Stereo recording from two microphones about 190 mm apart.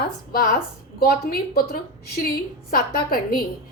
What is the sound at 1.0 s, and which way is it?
A woman's voice, 50° left (ahead or behind).